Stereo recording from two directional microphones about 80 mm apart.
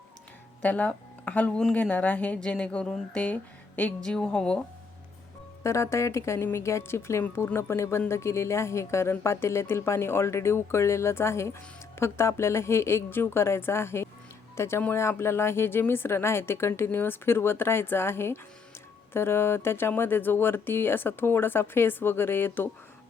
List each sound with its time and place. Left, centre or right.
0.6 s speech: centre
5.6 s speech: left